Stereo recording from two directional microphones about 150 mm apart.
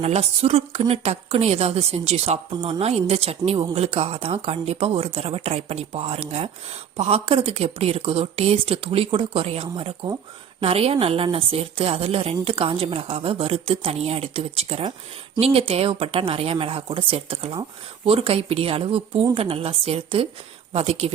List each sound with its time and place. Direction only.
0.0 s a woman's voice: 45° right (ahead or behind)